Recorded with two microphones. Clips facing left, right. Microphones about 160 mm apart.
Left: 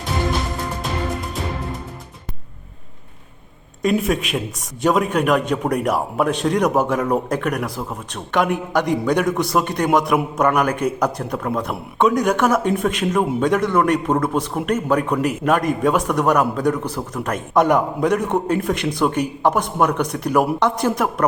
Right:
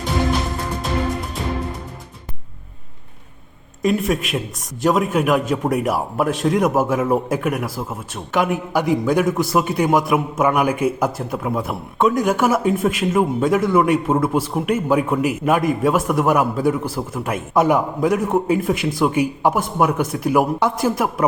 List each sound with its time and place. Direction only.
3.8 s a man's voice: centre (ahead or behind)